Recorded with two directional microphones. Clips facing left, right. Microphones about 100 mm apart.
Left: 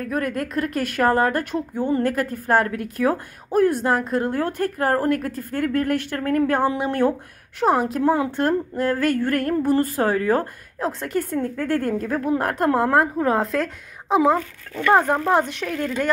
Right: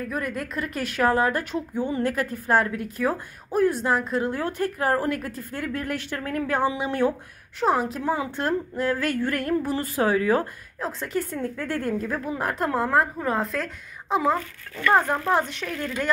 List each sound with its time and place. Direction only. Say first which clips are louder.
0.0 s a woman's voice: left 4 dB; 55° left (ahead or behind)
10.8 s a woman's voice: left 4 dB; 60° left (ahead or behind)
12.3 s a woman's voice: left 7 dB; 60° left (ahead or behind)
14.1 s speech: left 5 dB; 65° left (ahead or behind)
14.8 s speech: left 3 dB; 20° left (ahead or behind)
15.3 s a woman's voice: left 4 dB; 60° left (ahead or behind)
15.8 s a woman's voice: left 5 dB; 50° left (ahead or behind)